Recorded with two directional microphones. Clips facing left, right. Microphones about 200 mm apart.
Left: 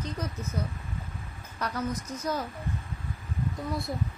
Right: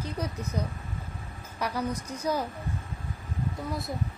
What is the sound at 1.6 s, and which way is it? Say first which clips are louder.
Speech: right 1 dB; 10° right (ahead or behind).